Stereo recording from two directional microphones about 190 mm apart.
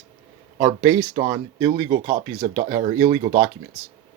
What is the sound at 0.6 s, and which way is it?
Speech, 30° right (ahead or behind).